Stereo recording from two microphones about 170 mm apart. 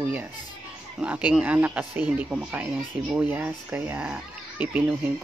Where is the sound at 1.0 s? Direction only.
5° right (ahead or behind).